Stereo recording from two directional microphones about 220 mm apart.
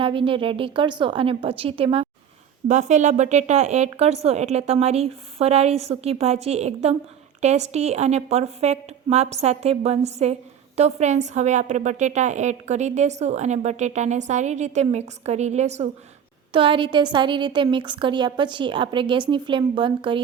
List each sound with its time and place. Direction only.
0.0 s a woman's voice: 25° right (ahead or behind)